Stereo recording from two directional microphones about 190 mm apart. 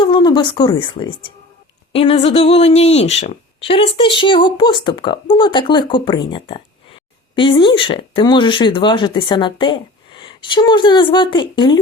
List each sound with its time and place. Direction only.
0.0 s speech: 25° left (ahead or behind)